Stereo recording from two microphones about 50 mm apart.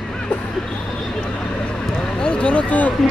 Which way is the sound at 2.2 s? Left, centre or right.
Left.